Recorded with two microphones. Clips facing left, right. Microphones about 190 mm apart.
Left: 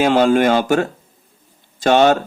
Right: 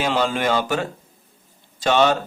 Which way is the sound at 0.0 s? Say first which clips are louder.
Left 8 dB; 50° left (ahead or behind).